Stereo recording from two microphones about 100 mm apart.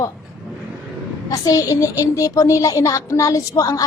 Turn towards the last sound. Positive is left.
turn(degrees=35)  # may be behind; listen again after turning